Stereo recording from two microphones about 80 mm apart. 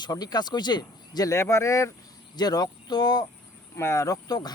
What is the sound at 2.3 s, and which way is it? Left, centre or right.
Speech, left.